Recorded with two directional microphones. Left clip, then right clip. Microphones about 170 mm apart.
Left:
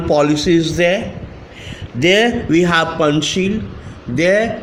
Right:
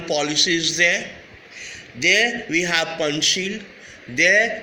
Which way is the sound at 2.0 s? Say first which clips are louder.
Left 4 dB; 45° left (ahead or behind).